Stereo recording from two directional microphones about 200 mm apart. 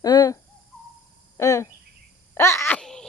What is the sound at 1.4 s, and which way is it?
Speech, 15° left (ahead or behind).